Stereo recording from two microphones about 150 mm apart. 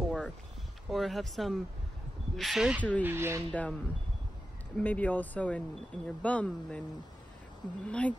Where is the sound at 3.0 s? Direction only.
15° right (ahead or behind).